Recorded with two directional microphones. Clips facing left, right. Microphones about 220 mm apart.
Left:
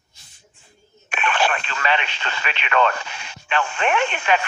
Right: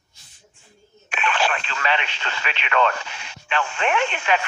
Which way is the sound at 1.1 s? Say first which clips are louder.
Left 1 dB; 55° left (ahead or behind).